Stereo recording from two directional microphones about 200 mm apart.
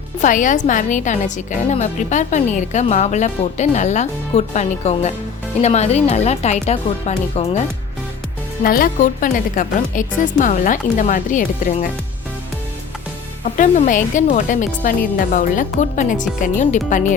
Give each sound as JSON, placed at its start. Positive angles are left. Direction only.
{"t": 0.2, "sound": "a woman's voice", "side_deg": 40}
{"t": 8.6, "sound": "a woman's voice", "side_deg": 45}
{"t": 13.6, "sound": "a woman's voice", "side_deg": 40}